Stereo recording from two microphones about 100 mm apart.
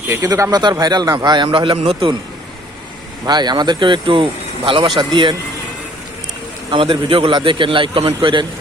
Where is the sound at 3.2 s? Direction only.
45° right (ahead or behind).